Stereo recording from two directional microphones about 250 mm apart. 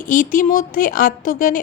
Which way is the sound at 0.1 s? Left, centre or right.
Left.